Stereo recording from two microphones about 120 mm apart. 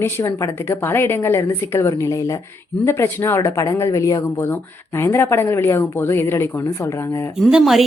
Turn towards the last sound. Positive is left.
turn(degrees=-5)  # may be behind; listen again after turning